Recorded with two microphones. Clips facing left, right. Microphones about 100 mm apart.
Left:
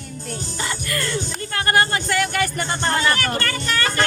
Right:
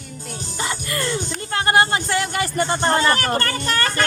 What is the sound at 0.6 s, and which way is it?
Music, 25° right (ahead or behind).